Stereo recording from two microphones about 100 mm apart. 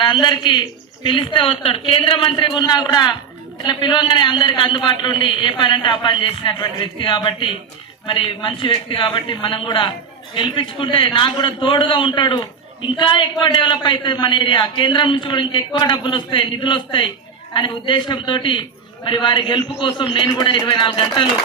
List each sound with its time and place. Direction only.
0.0 s a man's voice: 50° left (ahead or behind)